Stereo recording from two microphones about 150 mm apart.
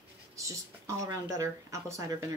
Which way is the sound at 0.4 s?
20° right (ahead or behind).